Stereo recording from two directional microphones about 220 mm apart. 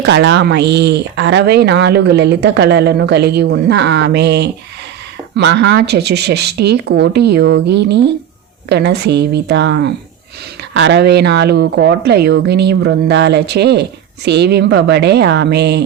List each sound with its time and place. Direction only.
0.0 s speech: 50° right (ahead or behind)